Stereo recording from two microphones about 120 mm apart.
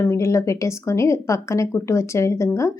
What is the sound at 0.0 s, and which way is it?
A woman's voice, 25° left (ahead or behind).